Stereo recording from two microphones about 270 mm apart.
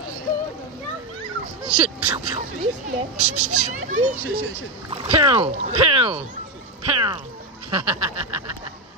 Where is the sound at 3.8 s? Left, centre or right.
Right.